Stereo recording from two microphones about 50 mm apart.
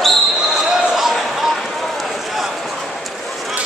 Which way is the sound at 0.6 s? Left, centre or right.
Centre.